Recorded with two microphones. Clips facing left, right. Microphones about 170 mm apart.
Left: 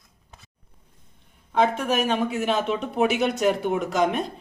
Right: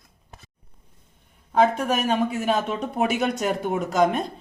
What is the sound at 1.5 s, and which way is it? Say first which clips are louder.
Speech: right 1 dB; 40° right (ahead or behind).